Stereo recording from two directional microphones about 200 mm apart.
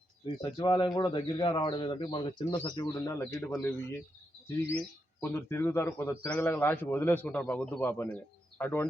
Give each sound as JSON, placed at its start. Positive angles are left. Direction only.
{"t": 0.3, "sound": "a man's voice", "side_deg": 20}
{"t": 5.2, "sound": "a man's voice", "side_deg": 15}